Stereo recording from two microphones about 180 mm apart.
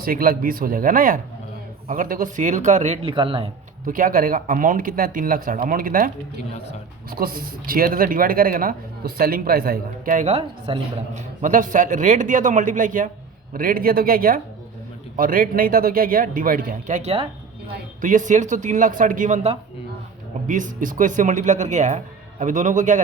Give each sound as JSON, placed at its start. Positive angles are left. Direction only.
{"t": 0.0, "sound": "a man's voice", "side_deg": -55}
{"t": 3.8, "sound": "a man's voice", "side_deg": -50}
{"t": 7.2, "sound": "a man's voice", "side_deg": -55}
{"t": 10.3, "sound": "a man's voice", "side_deg": -35}
{"t": 18.0, "sound": "a man's voice", "side_deg": -45}